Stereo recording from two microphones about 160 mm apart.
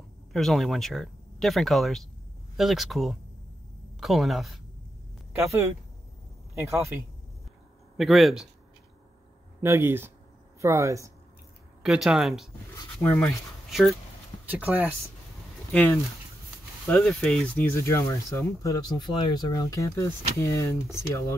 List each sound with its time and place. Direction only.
0.3 s speech: centre (ahead or behind)
5.3 s speech: 15° right (ahead or behind)
8.0 s speech: centre (ahead or behind)
9.6 s speech: 15° right (ahead or behind)
11.8 s speech: 5° right (ahead or behind)
13.0 s speech: 10° left (ahead or behind)
13.7 s speech: centre (ahead or behind)
17.0 s speech: 5° left (ahead or behind)
17.7 s speech: 20° left (ahead or behind)